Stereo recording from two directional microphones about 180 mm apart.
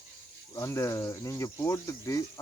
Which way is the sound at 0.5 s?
15° left (ahead or behind).